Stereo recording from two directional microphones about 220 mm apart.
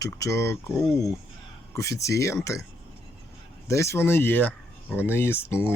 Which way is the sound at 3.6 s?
15° left (ahead or behind).